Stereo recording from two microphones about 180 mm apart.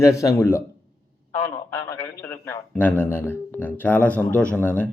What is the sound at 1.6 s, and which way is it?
A man's voice, 10° left (ahead or behind).